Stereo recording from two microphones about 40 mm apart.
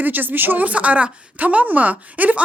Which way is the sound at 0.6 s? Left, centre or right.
Right.